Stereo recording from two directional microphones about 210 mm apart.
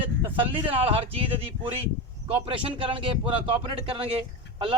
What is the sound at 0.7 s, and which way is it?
Speech, 25° right (ahead or behind).